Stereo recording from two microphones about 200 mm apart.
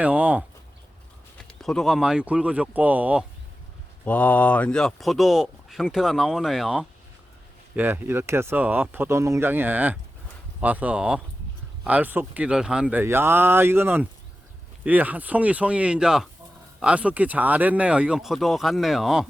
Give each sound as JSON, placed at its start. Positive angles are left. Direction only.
{"t": 0.0, "sound": "speech", "side_deg": -5}
{"t": 1.5, "sound": "speech", "side_deg": 0}
{"t": 4.0, "sound": "speech", "side_deg": 10}